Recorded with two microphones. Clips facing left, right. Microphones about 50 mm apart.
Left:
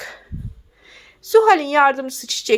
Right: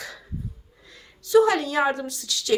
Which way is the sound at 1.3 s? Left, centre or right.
Left.